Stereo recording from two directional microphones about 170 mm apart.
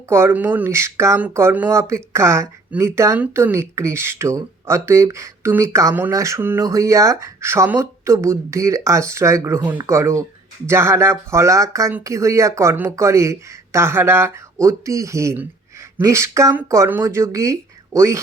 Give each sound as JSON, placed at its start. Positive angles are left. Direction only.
{"t": 0.1, "sound": "speech", "side_deg": -15}